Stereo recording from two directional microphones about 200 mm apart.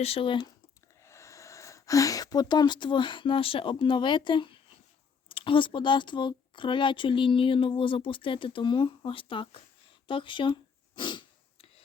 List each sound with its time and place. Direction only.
0.0 s speech: 30° left (ahead or behind)
10.1 s sniff: 25° left (ahead or behind)